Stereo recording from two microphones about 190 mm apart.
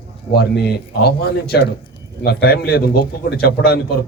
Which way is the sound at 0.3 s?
55° left (ahead or behind).